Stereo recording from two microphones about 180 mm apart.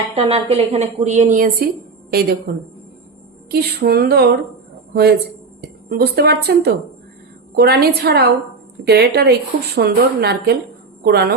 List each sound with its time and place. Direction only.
0.2 s a woman's voice: 35° right (ahead or behind); by 4.4 s 65° right (ahead or behind)
5.6 s speech: 60° right (ahead or behind)